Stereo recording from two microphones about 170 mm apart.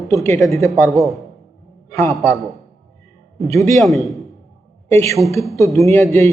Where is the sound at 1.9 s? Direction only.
20° left (ahead or behind).